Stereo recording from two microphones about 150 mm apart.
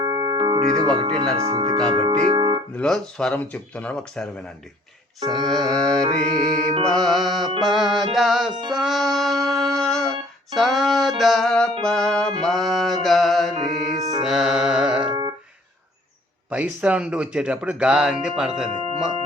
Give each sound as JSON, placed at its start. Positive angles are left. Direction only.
{"t": 0.0, "sound": "organ", "side_deg": -30}
{"t": 1.5, "sound": "speech", "side_deg": -30}
{"t": 2.1, "sound": "music", "side_deg": -40}
{"t": 2.7, "sound": "speech", "side_deg": 5}
{"t": 5.2, "sound": "speech", "side_deg": -25}
{"t": 5.5, "sound": "speech", "side_deg": 0}
{"t": 6.1, "sound": "music", "side_deg": -50}
{"t": 6.8, "sound": "speech", "side_deg": 5}
{"t": 8.7, "sound": "music", "side_deg": 0}
{"t": 11.2, "sound": "speech", "side_deg": 0}
{"t": 12.4, "sound": "music", "side_deg": 0}
{"t": 16.5, "sound": "speech", "side_deg": -10}